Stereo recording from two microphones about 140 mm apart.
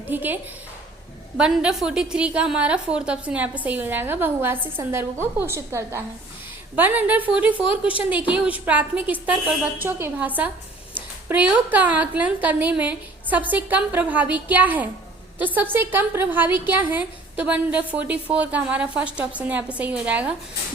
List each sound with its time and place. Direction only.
0.1 s a woman's voice: 15° right (ahead or behind)
1.4 s a woman's voice: 5° right (ahead or behind)